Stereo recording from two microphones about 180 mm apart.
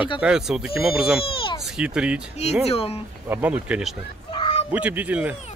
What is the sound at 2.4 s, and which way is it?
Speech, 35° left (ahead or behind).